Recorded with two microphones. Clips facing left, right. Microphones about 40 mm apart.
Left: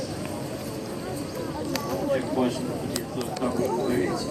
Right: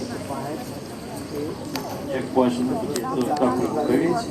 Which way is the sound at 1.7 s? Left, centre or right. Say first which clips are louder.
Left 5 dB; centre.